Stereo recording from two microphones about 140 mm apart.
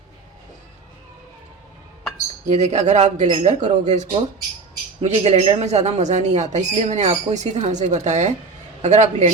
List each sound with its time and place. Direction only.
2.5 s speech: 55° right (ahead or behind)